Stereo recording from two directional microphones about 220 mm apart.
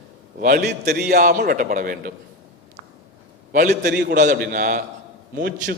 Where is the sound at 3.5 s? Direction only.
40° right (ahead or behind).